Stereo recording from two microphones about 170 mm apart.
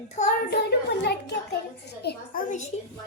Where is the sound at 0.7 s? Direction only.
75° left (ahead or behind); by 2.7 s 45° left (ahead or behind).